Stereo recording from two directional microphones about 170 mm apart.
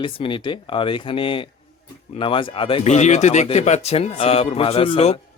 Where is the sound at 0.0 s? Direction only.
30° left (ahead or behind).